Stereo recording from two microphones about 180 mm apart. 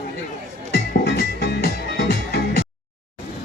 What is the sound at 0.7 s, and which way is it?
Music, 60° left (ahead or behind).